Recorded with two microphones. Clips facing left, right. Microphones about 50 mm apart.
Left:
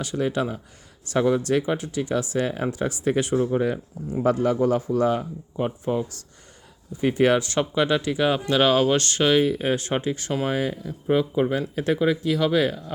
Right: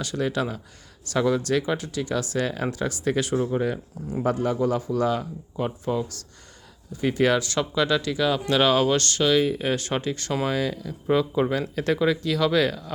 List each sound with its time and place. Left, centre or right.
0.0 s speech: centre
3.3 s speech: centre
4.3 s a man's voice: left
5.5 s speech: centre
8.4 s speech: centre
8.9 s speech: left